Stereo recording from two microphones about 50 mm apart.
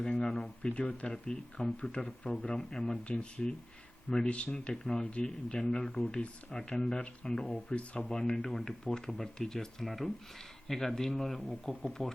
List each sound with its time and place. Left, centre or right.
0.0 s speech: centre
0.6 s speech: left
8.4 s speech: centre